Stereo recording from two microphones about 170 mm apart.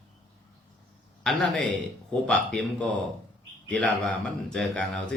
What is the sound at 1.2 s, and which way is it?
A man's voice, centre (ahead or behind).